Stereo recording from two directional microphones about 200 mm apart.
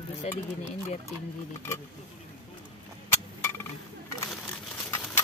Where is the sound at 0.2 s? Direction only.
35° left (ahead or behind).